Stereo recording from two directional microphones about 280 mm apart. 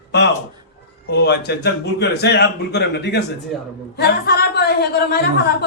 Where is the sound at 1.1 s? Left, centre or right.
Left.